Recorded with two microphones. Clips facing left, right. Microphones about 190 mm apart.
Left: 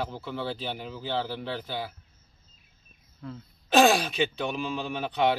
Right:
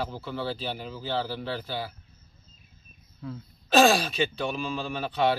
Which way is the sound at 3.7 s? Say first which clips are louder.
Even; 15° left (ahead or behind).